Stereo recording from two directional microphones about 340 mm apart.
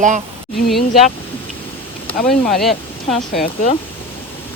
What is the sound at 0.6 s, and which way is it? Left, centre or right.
Speech, centre.